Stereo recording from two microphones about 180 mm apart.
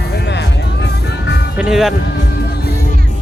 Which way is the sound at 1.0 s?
70° left (ahead or behind).